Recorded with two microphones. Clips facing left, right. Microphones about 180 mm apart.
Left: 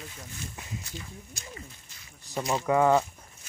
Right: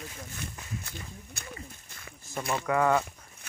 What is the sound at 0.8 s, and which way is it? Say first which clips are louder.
Speech: left 1 dB; 55° right (ahead or behind).